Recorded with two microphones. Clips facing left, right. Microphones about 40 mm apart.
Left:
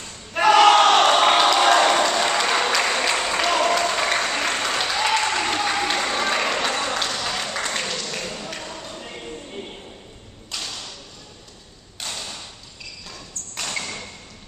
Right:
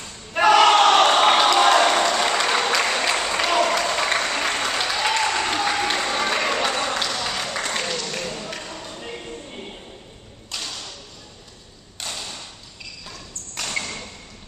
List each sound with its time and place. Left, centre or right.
0.3 s crowd: centre
10.5 s thump: centre
12.0 s thump: centre
13.6 s a sound: centre